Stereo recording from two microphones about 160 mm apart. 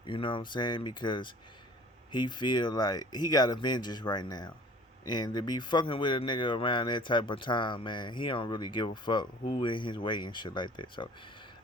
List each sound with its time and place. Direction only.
0.0 s speech: 30° left (ahead or behind)